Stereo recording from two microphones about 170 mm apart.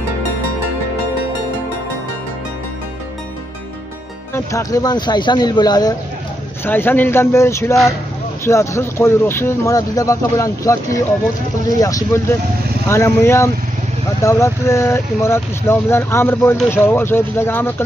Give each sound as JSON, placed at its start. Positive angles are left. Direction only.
{"t": 4.3, "sound": "speech", "side_deg": 15}
{"t": 6.6, "sound": "speech", "side_deg": 10}
{"t": 11.8, "sound": "speech", "side_deg": 20}